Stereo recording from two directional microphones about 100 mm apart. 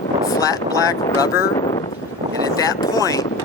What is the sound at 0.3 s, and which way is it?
Speech, 35° left (ahead or behind).